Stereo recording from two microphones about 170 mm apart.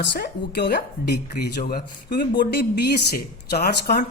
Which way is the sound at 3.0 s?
65° left (ahead or behind).